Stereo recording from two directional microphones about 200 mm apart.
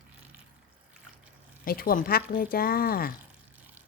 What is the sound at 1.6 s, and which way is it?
Speech, 45° left (ahead or behind).